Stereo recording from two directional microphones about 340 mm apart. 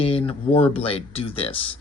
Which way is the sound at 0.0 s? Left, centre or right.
Centre.